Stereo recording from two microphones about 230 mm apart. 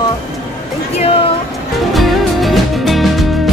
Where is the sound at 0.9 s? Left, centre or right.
Left.